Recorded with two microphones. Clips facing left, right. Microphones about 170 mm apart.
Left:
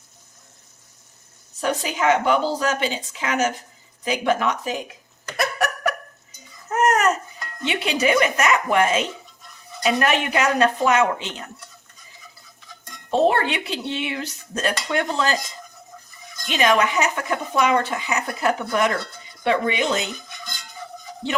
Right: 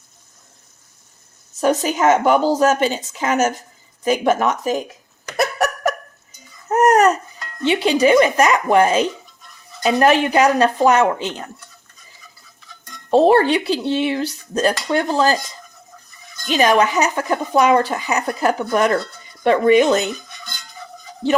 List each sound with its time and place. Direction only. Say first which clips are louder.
1.6 s speech: right 5 dB; 45° right (ahead or behind)
5.4 s laughter: right 4 dB; 40° right (ahead or behind)
6.7 s babbling: right 6 dB; 40° right (ahead or behind)
7.6 s speech: right 7 dB; 30° right (ahead or behind)
13.1 s speech: right 6 dB; 35° right (ahead or behind)
16.5 s speech: right 4 dB; 35° right (ahead or behind)